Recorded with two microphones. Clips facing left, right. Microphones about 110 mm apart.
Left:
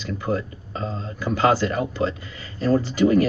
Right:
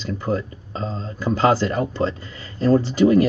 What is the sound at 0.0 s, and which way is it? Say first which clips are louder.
Speech: right 1 dB; 40° right (ahead or behind).